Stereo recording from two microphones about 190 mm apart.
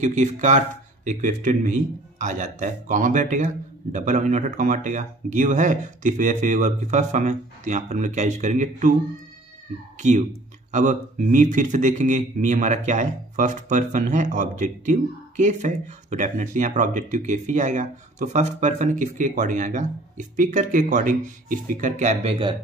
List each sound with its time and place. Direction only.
0.0 s speech: 40° right (ahead or behind)
9.9 s speech: 40° right (ahead or behind)